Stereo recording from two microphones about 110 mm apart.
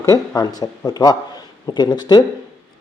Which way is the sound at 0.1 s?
35° left (ahead or behind).